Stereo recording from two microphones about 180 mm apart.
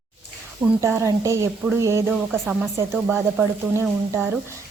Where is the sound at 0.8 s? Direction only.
15° right (ahead or behind).